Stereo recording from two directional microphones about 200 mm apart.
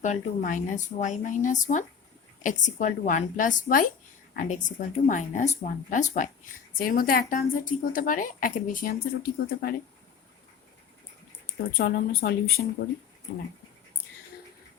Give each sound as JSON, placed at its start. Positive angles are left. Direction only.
{"t": 0.0, "sound": "a woman's voice", "side_deg": 40}
{"t": 11.8, "sound": "speech", "side_deg": 55}
{"t": 12.6, "sound": "speech", "side_deg": 35}